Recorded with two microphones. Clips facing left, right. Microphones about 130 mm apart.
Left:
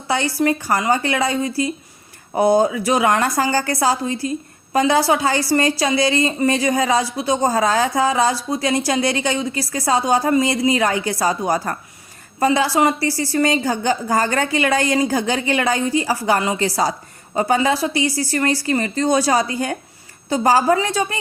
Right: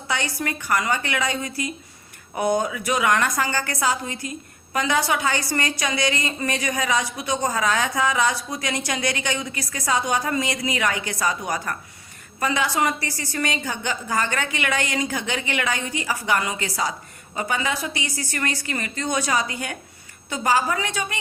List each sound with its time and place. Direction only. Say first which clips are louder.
0.1 s a woman's voice: left 8 dB; 30° left (ahead or behind)